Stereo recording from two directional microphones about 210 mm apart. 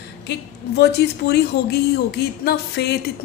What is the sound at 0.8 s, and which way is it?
Speech, 50° left (ahead or behind).